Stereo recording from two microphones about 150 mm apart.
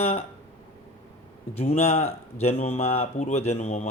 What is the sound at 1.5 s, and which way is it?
Speech, 45° left (ahead or behind).